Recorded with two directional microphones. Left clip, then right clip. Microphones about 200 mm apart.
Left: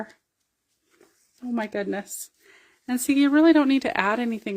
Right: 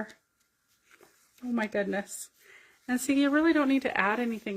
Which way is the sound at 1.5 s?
55° left (ahead or behind).